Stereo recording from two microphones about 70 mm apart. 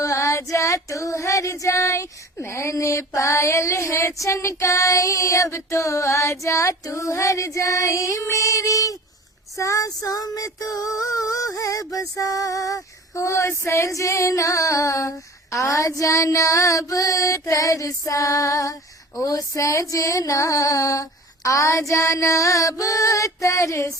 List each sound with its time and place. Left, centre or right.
0.0 s child singing: left
2.4 s female singing: left